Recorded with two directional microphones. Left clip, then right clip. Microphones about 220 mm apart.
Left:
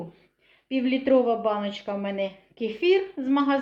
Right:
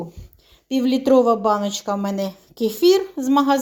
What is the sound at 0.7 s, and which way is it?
A woman's voice, 35° right (ahead or behind).